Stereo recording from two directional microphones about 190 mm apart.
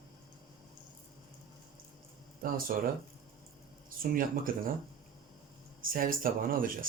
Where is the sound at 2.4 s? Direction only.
50° right (ahead or behind).